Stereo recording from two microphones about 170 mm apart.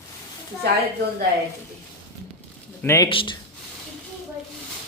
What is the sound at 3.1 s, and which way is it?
Speech, 30° left (ahead or behind).